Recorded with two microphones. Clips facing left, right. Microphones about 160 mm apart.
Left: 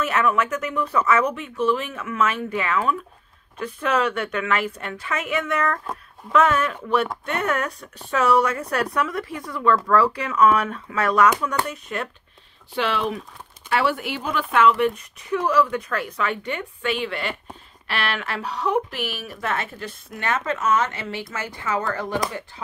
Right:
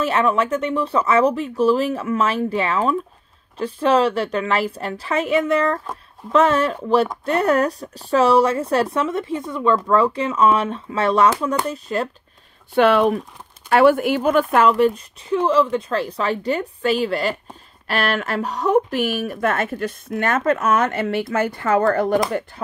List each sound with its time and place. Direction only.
0.0 s speech: 30° right (ahead or behind)
12.7 s speech: 55° right (ahead or behind)